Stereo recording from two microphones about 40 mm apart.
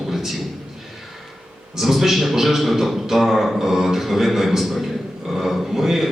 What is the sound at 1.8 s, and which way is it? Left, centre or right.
A man's voice, centre.